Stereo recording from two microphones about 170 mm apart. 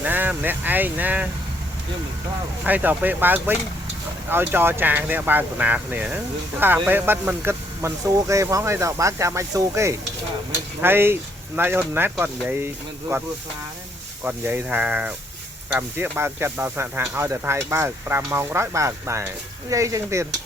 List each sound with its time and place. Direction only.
0.0 s speech: 10° right (ahead or behind)
2.6 s speech: 10° right (ahead or behind)
14.3 s speech: 10° right (ahead or behind)